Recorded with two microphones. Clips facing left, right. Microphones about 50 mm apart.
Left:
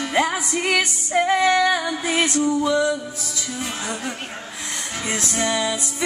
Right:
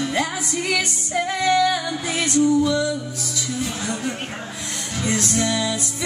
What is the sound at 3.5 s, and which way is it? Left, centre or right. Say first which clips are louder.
Speech: right 1 dB; centre.